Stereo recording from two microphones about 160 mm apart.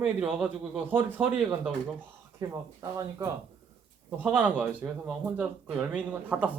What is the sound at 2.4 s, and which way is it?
Speech, 20° right (ahead or behind).